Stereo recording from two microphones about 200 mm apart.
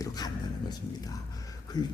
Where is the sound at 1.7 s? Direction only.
20° left (ahead or behind).